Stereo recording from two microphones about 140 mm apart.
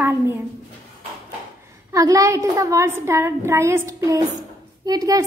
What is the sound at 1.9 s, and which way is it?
A child's voice, 25° right (ahead or behind).